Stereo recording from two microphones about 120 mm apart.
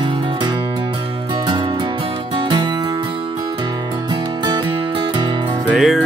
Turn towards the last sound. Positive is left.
turn(degrees=0)  # may be behind; listen again after turning